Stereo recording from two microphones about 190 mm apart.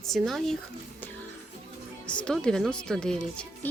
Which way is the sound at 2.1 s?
5° left (ahead or behind).